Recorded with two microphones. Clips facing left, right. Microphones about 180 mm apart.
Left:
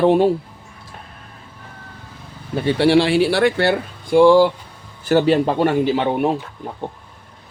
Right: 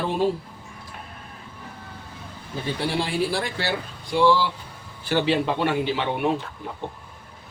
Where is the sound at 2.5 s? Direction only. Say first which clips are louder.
Left 12 dB; 75° left (ahead or behind); by 6.0 s 45° left (ahead or behind).